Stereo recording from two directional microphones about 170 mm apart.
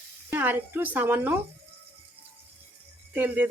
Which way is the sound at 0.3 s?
10° right (ahead or behind).